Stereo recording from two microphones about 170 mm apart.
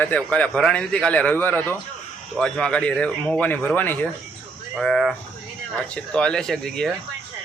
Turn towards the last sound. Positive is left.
turn(degrees=0)  # may be behind; listen again after turning